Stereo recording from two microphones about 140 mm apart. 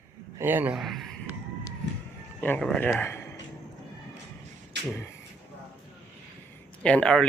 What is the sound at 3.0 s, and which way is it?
Speech, 15° left (ahead or behind).